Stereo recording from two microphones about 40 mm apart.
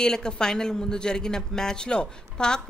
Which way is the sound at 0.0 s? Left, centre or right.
Centre.